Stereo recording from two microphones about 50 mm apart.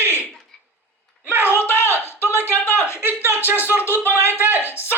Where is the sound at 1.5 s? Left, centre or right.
Left.